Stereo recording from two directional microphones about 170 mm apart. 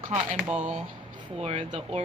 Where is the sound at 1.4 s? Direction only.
35° right (ahead or behind).